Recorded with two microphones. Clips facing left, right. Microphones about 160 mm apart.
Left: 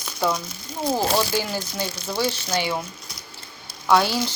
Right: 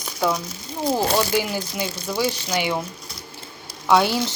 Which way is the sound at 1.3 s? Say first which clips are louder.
Right 3 dB; 15° right (ahead or behind).